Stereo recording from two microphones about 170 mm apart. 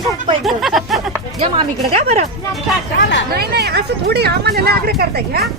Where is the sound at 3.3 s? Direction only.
70° right (ahead or behind).